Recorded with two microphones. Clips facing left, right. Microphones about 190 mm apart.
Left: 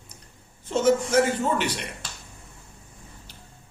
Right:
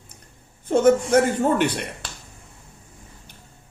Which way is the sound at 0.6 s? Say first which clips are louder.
Right 4 dB; 55° right (ahead or behind).